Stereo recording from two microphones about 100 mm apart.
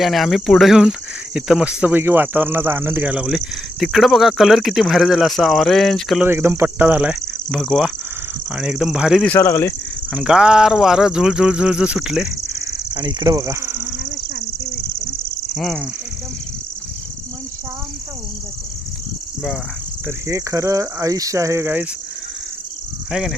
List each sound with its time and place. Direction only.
0.0 s cricket: centre (ahead or behind)
6.2 s speech: 25° right (ahead or behind)
7.5 s cricket: centre (ahead or behind)
9.3 s speech: 25° left (ahead or behind)
10.2 s a sound: 5° right (ahead or behind)
12.9 s speech: 45° right (ahead or behind); by 13.7 s 30° right (ahead or behind)
15.5 s cricket: centre (ahead or behind)
20.1 s speech: 30° right (ahead or behind)